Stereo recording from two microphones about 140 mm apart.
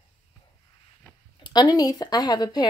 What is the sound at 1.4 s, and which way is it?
A woman's voice, 30° left (ahead or behind).